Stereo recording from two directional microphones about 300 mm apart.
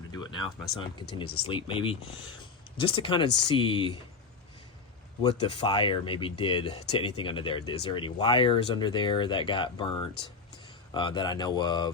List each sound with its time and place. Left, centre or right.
0.1 s a sound: centre
0.8 s speech: centre
5.7 s speech: centre